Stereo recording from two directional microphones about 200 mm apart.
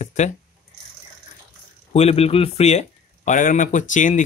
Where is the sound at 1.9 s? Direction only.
30° left (ahead or behind).